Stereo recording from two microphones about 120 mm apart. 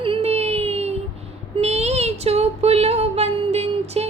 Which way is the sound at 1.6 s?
65° right (ahead or behind).